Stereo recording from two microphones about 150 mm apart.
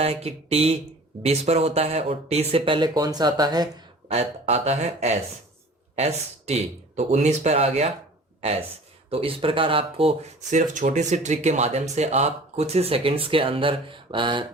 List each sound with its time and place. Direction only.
0.0 s speech: 40° right (ahead or behind)
4.1 s speech: 45° right (ahead or behind)
9.0 s speech: 40° right (ahead or behind)
10.8 s speech: 50° right (ahead or behind); by 14.4 s 35° right (ahead or behind)